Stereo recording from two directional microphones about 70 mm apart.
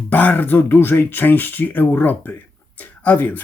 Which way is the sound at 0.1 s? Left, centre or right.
Left.